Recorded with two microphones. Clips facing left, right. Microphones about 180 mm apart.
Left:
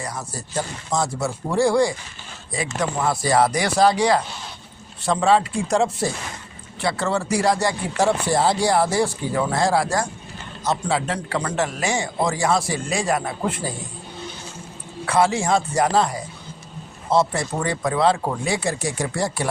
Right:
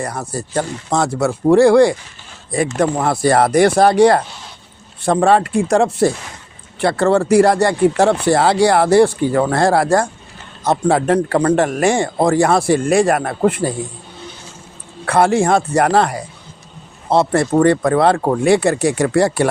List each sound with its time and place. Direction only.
0.0 s speech: 60° right (ahead or behind)
2.5 s speech: 55° right (ahead or behind)
15.0 s speech: 60° right (ahead or behind)